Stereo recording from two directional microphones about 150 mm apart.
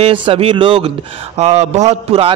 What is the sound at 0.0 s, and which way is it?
A man's voice, 35° right (ahead or behind).